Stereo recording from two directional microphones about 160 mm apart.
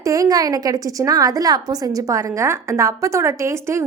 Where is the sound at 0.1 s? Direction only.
20° right (ahead or behind).